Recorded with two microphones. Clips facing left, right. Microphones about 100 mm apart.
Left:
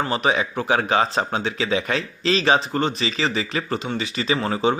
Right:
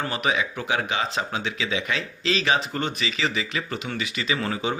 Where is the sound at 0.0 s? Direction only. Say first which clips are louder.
Left 4 dB; 30° left (ahead or behind).